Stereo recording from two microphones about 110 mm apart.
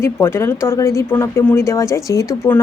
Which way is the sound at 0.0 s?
20° left (ahead or behind).